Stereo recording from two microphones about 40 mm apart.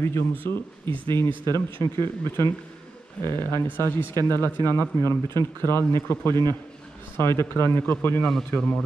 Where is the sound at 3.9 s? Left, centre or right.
Left.